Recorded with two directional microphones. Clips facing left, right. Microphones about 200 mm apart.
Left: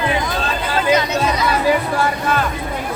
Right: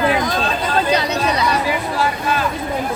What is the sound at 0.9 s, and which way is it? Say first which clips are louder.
Chatter: left 1 dB; 35° right (ahead or behind).